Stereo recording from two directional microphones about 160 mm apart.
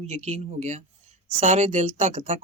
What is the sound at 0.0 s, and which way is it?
Speech, 45° right (ahead or behind).